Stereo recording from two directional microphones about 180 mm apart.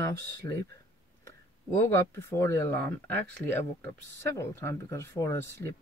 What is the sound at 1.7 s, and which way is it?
Speech, 15° left (ahead or behind).